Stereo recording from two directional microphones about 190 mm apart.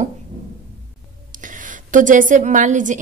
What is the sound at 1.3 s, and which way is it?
A woman's voice, 45° right (ahead or behind).